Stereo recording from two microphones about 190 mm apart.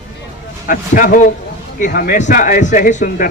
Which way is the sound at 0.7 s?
45° left (ahead or behind).